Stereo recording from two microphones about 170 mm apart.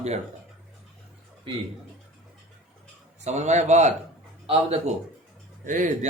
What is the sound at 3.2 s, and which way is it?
A man's voice, 40° right (ahead or behind).